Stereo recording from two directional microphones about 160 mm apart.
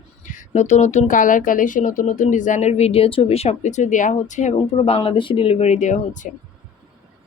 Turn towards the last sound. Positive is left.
turn(degrees=50)  # may be behind; listen again after turning